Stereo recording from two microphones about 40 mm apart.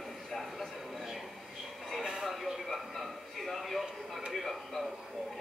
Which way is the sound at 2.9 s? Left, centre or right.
Centre.